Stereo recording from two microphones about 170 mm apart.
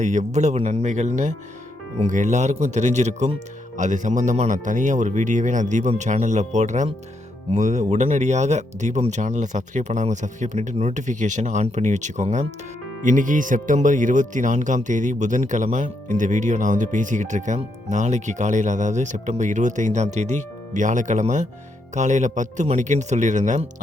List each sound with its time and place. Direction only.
0.0 s speech: 45° right (ahead or behind)